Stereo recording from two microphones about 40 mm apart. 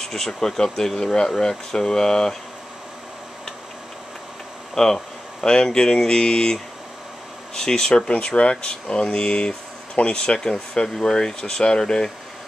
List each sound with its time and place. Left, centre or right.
0.0 s speech: centre
4.7 s speech: centre
8.2 s speech: left